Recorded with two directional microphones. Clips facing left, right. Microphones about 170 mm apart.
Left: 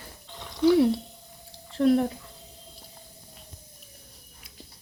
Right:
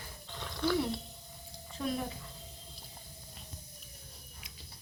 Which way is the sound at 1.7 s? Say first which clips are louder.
Left 14 dB; 80° left.